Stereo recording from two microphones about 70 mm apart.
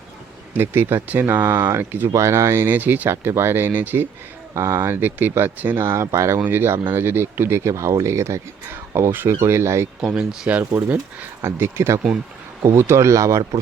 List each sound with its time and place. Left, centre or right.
0.5 s speech: right
1.0 s speech: right
1.5 s speech: right
1.8 s speech: right
2.1 s speech: right
3.1 s speech: right
4.5 s speech: right
5.8 s speech: right
10.0 s speech: centre
10.6 s speech: right
11.4 s speech: right